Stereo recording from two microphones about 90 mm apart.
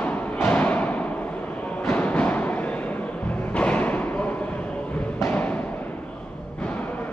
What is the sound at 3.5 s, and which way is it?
Thump, 15° left (ahead or behind).